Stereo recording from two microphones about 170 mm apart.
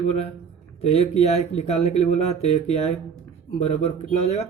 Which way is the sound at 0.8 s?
35° left (ahead or behind).